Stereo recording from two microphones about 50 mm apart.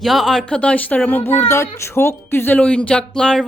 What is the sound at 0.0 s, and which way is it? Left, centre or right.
Speech, centre.